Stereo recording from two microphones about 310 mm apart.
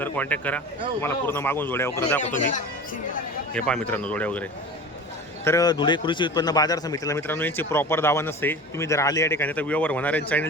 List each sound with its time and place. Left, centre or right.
0.0 s a man's voice: centre
2.2 s a man's voice: left
3.5 s speech: centre
5.5 s a man's voice: centre